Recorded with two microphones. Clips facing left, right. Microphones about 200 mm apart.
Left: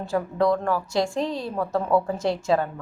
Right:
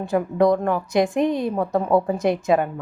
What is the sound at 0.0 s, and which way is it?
A woman's voice, 15° right (ahead or behind).